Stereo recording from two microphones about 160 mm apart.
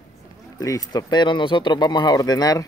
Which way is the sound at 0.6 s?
20° left (ahead or behind).